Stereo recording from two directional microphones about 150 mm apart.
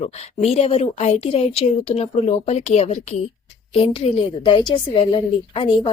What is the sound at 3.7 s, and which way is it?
Speech, 40° left (ahead or behind).